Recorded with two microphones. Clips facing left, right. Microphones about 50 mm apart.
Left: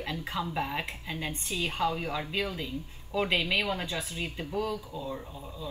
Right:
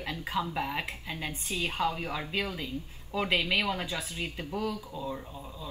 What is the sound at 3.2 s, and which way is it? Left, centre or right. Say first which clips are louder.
Speech: even; left.